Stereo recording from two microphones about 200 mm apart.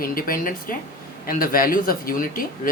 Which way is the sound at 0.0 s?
45° left (ahead or behind).